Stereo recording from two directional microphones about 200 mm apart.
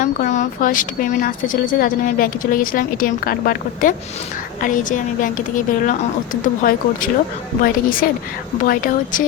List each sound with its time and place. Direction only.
0.0 s a woman's voice: 40° left (ahead or behind)